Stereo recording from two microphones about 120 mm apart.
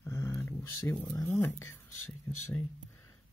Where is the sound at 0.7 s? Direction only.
25° left (ahead or behind).